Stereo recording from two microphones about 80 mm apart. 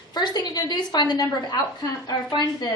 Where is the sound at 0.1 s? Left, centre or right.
Left.